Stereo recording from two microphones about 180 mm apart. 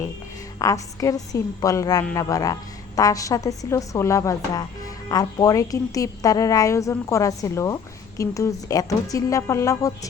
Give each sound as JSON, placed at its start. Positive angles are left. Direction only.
{"t": 0.6, "sound": "a woman's voice", "side_deg": 20}